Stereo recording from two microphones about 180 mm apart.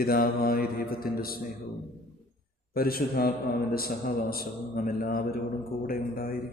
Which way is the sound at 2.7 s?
55° left (ahead or behind).